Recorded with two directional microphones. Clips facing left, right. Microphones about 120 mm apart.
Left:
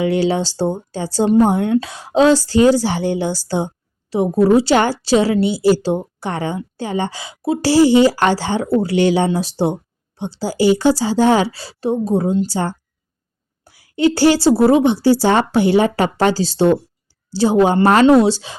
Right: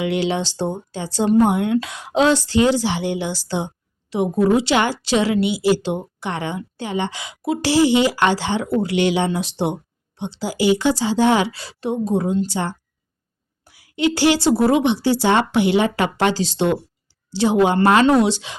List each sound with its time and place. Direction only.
0.0 s a woman's voice: 40° left (ahead or behind)